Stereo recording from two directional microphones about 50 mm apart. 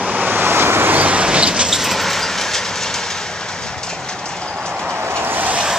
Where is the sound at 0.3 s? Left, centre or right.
Right.